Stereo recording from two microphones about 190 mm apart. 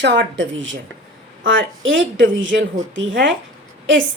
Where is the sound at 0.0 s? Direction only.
70° right (ahead or behind).